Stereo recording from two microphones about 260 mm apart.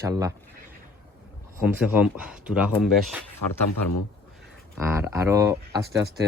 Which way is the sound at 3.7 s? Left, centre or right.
Left.